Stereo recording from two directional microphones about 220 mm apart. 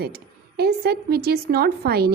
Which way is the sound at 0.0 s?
45° right (ahead or behind).